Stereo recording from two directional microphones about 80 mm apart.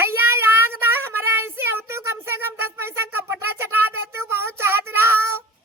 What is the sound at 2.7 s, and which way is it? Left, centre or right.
Wind instrument, right.